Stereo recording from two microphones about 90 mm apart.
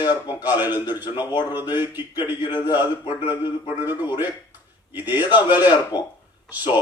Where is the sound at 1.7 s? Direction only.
25° right (ahead or behind).